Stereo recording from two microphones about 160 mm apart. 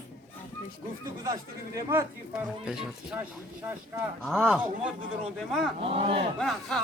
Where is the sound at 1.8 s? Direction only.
15° right (ahead or behind).